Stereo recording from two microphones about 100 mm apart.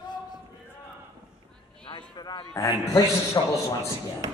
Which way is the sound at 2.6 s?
30° left (ahead or behind).